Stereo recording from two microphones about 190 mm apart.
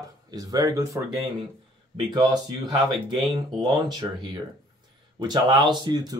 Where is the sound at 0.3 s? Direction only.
20° right (ahead or behind).